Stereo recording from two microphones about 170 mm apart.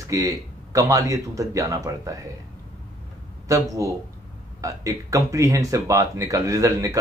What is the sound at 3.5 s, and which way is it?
Speech, 20° right (ahead or behind).